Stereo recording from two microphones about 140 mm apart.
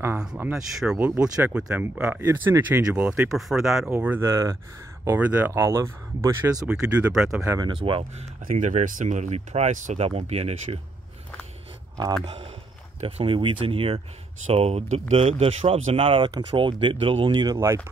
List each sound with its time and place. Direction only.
0.4 s speech: 5° right (ahead or behind)
3.9 s speech: 15° right (ahead or behind)
6.7 s speech: 5° right (ahead or behind)
7.4 s speech: 30° right (ahead or behind)
8.5 s speech: 65° right (ahead or behind); by 10.8 s 45° right (ahead or behind)
12.3 s speech: 40° right (ahead or behind); by 17.7 s 25° right (ahead or behind)